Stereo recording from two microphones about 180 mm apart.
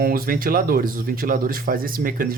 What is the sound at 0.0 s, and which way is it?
A man's voice, 55° right (ahead or behind).